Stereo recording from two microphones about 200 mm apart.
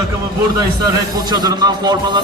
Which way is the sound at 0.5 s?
20° right (ahead or behind).